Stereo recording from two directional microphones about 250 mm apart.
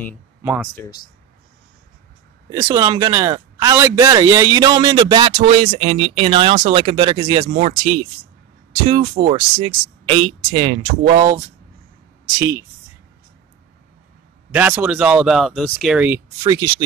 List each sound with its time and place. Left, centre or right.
0.4 s speech: centre
2.5 s speech: centre
14.5 s speech: centre